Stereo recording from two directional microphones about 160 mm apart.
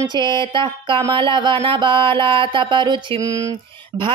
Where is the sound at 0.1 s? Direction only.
30° right (ahead or behind).